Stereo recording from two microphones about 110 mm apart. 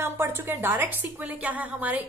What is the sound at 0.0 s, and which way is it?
A woman's voice, 20° right (ahead or behind).